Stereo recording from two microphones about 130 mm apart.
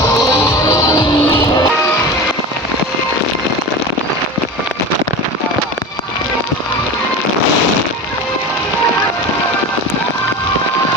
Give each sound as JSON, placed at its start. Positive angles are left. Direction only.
{"t": 0.7, "sound": "music", "side_deg": 25}